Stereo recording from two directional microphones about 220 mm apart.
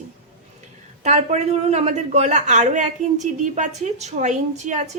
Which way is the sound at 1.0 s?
30° right (ahead or behind).